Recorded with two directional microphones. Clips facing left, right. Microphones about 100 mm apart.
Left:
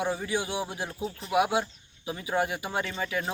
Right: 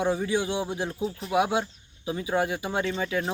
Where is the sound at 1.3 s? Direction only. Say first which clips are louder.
Right 1 dB; 15° left (ahead or behind).